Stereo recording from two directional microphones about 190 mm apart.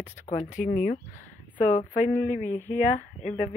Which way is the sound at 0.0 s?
40° left (ahead or behind).